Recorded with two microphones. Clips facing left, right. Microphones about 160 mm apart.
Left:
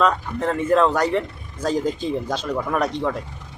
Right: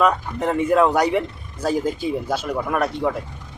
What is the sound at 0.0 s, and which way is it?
A man's voice, 15° right (ahead or behind).